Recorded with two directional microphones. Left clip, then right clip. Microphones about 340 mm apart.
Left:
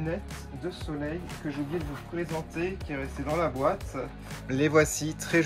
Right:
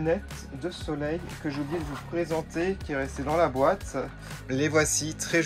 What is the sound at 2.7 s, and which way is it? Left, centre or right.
Speech, centre.